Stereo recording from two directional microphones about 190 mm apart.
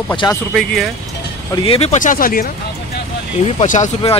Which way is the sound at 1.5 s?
25° left (ahead or behind).